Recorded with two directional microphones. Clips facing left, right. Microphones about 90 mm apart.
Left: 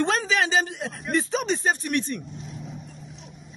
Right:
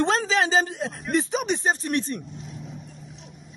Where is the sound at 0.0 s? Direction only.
30° right (ahead or behind).